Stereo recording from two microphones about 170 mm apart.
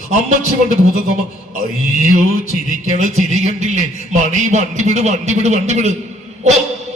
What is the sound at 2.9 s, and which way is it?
A man's voice, 40° right (ahead or behind).